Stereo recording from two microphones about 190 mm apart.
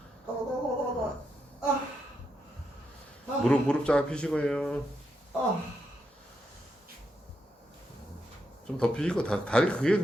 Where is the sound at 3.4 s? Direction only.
5° left (ahead or behind).